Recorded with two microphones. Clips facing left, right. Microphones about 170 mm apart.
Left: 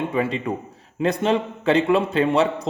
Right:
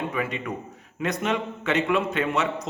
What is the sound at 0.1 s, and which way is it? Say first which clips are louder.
A man's voice: left 6 dB; 30° left (ahead or behind).